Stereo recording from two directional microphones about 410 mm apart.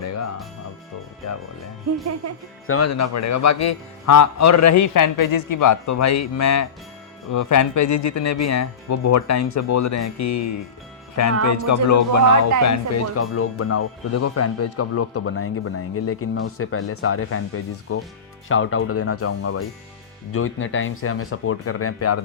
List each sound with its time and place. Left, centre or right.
0.0 s music: left
2.6 s speech: left